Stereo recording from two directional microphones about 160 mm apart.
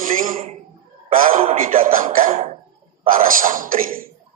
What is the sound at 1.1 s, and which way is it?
Speech, 60° right (ahead or behind).